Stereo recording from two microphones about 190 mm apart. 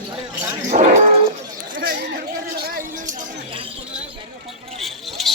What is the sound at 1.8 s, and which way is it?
Speech, 50° right (ahead or behind).